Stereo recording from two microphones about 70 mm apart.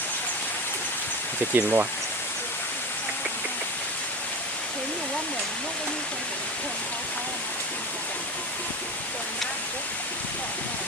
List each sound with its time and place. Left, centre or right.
1.5 s speech: right